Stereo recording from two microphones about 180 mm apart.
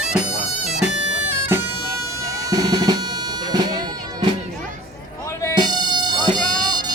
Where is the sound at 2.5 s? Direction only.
20° right (ahead or behind).